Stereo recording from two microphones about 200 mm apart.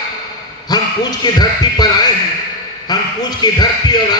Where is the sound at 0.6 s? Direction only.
20° left (ahead or behind).